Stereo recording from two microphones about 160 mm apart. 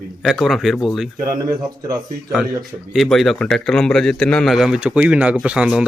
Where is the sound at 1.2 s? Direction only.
20° right (ahead or behind).